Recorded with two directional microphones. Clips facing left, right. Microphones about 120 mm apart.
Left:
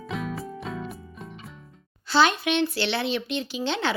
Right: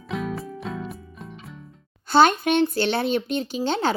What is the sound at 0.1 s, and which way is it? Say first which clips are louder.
Music: right 3 dB; centre (ahead or behind).